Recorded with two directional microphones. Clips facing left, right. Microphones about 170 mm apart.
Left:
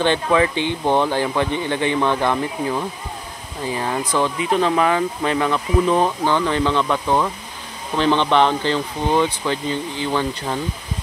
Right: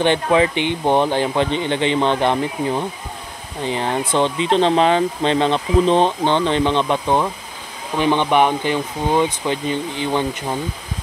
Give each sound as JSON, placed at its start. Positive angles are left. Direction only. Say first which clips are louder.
{"t": 0.0, "sound": "speech", "louder": "right 2 dB", "side_deg": -20}